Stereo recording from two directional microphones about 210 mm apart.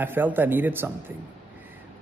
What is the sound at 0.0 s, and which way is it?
A man's voice, 10° right (ahead or behind).